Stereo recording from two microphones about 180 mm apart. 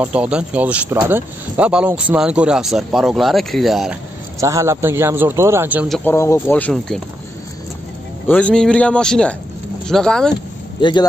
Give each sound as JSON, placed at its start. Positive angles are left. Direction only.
{"t": 0.0, "sound": "speech", "side_deg": -5}
{"t": 4.4, "sound": "a man's voice", "side_deg": -15}
{"t": 5.9, "sound": "speech", "side_deg": 15}
{"t": 8.3, "sound": "speech", "side_deg": 5}
{"t": 10.8, "sound": "speech", "side_deg": 25}